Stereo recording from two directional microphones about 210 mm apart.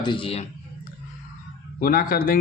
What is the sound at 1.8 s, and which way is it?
Speech, 45° left (ahead or behind).